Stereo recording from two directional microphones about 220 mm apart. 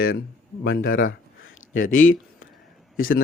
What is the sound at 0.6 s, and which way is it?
Speech, 55° left (ahead or behind).